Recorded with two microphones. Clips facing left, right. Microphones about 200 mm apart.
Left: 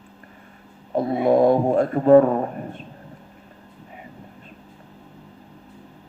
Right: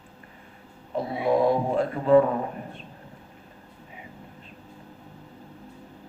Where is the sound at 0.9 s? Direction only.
50° left (ahead or behind).